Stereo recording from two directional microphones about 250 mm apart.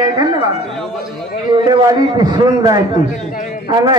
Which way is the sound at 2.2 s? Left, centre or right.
Centre.